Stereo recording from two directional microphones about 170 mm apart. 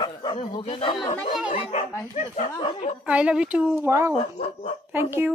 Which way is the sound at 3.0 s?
5° right (ahead or behind).